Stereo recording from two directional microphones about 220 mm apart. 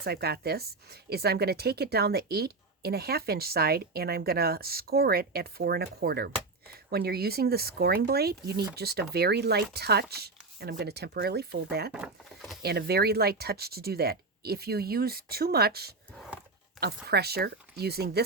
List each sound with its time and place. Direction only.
0.0 s a woman's voice: 45° right (ahead or behind)
11.9 s speech: centre (ahead or behind)
12.6 s a woman's voice: 45° right (ahead or behind)
16.1 s a sound: centre (ahead or behind)
16.8 s a woman's voice: 45° right (ahead or behind)